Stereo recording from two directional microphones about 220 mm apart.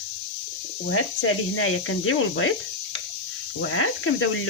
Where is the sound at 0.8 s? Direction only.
65° left (ahead or behind).